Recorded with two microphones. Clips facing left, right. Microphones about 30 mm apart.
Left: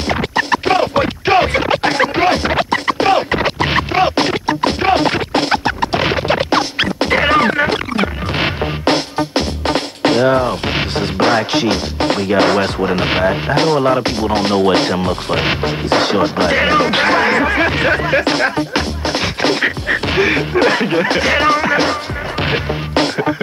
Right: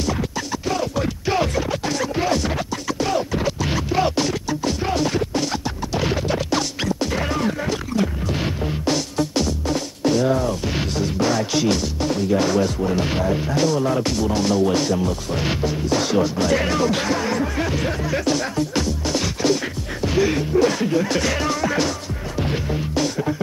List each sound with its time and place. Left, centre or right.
0.1 s music: left
9.2 s music: left
9.7 s music: left
12.0 s speech: left
22.4 s music: left